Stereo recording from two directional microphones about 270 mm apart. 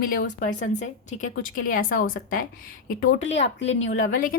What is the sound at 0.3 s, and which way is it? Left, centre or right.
A woman's voice, left.